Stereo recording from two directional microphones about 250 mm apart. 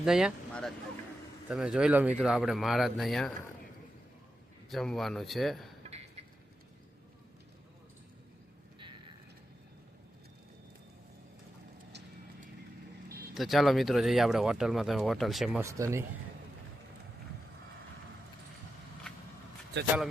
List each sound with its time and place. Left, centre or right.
0.0 s speech: centre
4.7 s speech: centre
5.8 s a sound: right
11.9 s clip-clop: right
13.3 s speech: centre
19.8 s speech: right